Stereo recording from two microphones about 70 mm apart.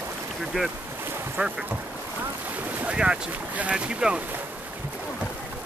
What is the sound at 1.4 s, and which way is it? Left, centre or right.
Speech, right.